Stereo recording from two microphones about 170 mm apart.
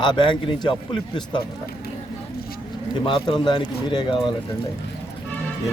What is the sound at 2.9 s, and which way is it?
A man's voice, 30° left (ahead or behind).